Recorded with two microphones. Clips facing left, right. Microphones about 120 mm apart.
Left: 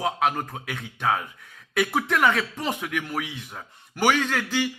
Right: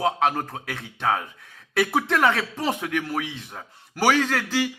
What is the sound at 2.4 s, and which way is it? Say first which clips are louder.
A man's voice: right 2 dB; 35° right (ahead or behind).